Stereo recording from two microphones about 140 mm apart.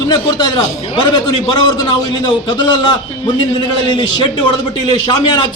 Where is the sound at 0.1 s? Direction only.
30° left (ahead or behind).